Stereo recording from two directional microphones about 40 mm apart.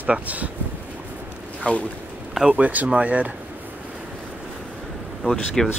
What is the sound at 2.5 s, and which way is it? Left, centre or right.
Speech, right.